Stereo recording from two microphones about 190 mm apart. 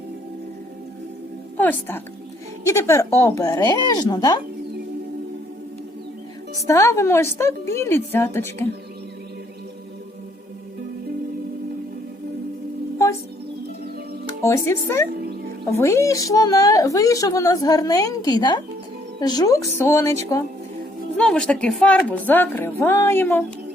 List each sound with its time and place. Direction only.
1.5 s speech: 10° left (ahead or behind)
6.7 s speech: 15° left (ahead or behind)
14.4 s a woman's voice: 15° left (ahead or behind)
21.2 s speech: 5° left (ahead or behind)